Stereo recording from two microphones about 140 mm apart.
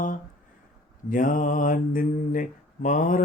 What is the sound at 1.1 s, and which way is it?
Mantra, 70° left (ahead or behind).